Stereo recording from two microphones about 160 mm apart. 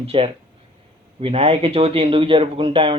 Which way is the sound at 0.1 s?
35° right (ahead or behind).